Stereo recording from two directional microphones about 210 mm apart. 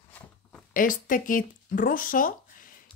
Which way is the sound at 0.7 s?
40° left (ahead or behind).